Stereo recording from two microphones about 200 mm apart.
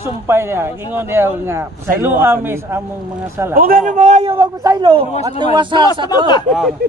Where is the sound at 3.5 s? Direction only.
45° right (ahead or behind); by 5.1 s 25° right (ahead or behind).